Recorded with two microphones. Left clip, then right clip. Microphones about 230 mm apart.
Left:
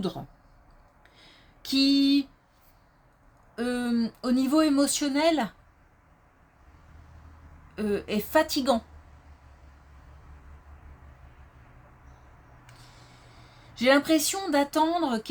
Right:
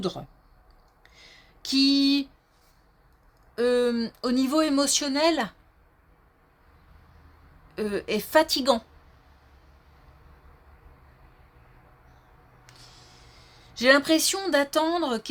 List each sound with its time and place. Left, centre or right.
1.0 s a sound: right
3.5 s speech: right
7.8 s speech: right
13.7 s speech: right